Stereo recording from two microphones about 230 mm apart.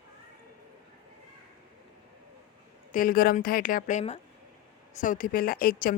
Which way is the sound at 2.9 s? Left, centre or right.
Left.